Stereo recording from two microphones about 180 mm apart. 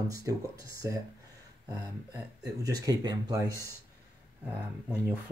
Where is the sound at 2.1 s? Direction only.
20° right (ahead or behind).